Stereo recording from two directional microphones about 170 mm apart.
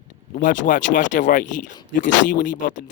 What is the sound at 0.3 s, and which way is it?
Speech, 50° left (ahead or behind).